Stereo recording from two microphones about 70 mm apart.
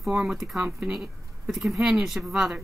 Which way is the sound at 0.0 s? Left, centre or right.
Centre.